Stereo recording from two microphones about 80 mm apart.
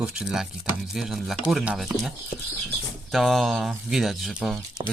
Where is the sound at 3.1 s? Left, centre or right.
Centre.